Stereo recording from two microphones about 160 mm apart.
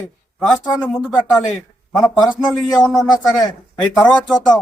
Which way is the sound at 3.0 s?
25° left (ahead or behind).